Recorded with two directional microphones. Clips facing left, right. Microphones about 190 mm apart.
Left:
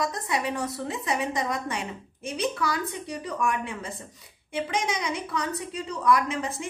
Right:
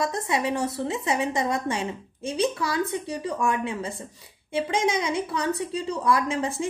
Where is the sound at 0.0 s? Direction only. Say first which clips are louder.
Right 3 dB; 25° right (ahead or behind).